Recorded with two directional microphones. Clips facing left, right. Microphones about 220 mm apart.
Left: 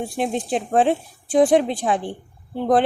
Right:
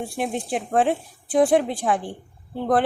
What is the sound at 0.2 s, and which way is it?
A woman's voice, 20° left (ahead or behind).